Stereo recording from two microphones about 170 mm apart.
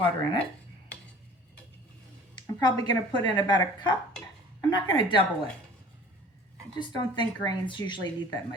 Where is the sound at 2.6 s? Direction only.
25° left (ahead or behind).